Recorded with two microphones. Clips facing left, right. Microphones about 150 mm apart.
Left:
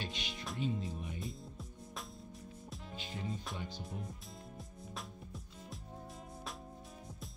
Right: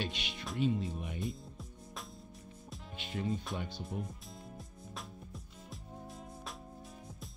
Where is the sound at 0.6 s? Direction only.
70° right (ahead or behind).